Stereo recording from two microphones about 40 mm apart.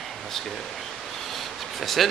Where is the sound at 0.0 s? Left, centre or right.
Centre.